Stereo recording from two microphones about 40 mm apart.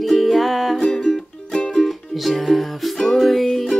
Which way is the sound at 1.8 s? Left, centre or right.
Centre.